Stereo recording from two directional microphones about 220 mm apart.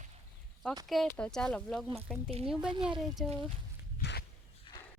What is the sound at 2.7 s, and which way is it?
Speech, 20° right (ahead or behind).